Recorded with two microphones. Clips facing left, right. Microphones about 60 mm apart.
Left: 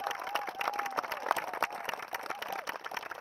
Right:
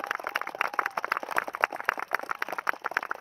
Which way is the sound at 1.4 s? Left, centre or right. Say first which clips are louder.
Right 5 dB; right.